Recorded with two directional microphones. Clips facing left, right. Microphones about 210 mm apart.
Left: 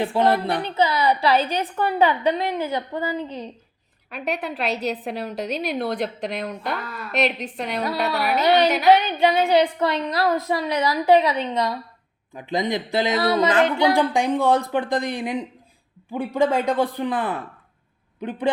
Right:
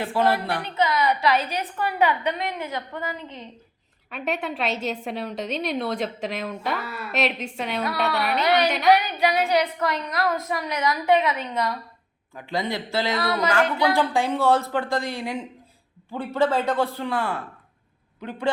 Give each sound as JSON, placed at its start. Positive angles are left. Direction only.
{"t": 0.0, "sound": "a woman's voice", "side_deg": 20}
{"t": 0.5, "sound": "a woman's voice", "side_deg": 30}
{"t": 4.1, "sound": "a woman's voice", "side_deg": 0}
{"t": 8.9, "sound": "a woman's voice", "side_deg": 25}